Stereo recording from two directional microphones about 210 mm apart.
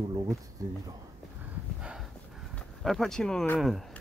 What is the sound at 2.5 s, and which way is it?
Speech, centre (ahead or behind).